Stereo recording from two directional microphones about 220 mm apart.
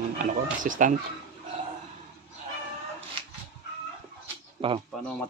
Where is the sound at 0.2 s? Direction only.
35° right (ahead or behind).